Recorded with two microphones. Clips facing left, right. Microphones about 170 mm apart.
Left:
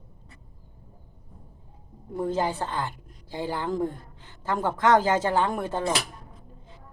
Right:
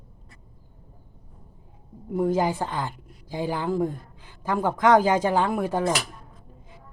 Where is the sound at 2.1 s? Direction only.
10° right (ahead or behind).